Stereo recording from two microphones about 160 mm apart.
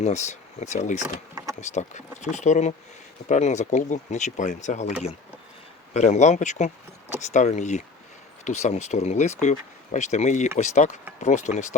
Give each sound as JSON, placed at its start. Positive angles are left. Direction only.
{"t": 0.0, "sound": "speech", "side_deg": 45}